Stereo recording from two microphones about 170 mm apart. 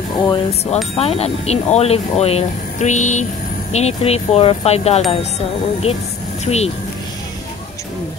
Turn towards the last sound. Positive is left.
turn(degrees=40)  # may be behind; listen again after turning